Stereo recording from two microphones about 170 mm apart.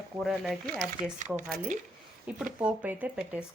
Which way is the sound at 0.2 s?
Centre (ahead or behind).